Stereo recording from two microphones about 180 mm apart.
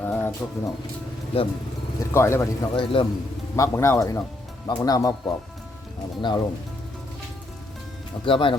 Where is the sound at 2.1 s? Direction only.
15° left (ahead or behind).